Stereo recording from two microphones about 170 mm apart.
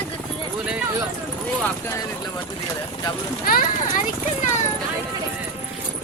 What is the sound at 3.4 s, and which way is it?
Speech, 60° left (ahead or behind).